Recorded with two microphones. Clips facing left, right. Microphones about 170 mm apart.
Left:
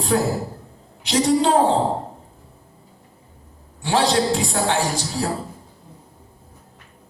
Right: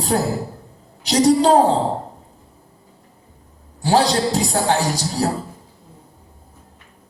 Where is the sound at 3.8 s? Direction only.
35° right (ahead or behind).